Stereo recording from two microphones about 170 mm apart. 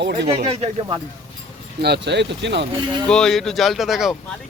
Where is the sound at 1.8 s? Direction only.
75° right (ahead or behind).